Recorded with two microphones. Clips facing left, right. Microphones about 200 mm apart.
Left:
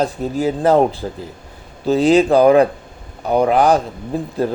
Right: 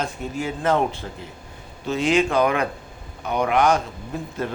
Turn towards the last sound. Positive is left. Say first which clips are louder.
# left 7 dB
turn(degrees=35)  # may be behind; listen again after turning